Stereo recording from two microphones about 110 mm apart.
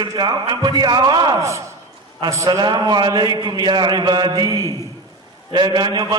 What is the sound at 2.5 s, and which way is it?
A man's voice, 40° right (ahead or behind).